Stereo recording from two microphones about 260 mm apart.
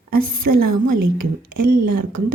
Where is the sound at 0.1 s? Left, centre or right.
Right.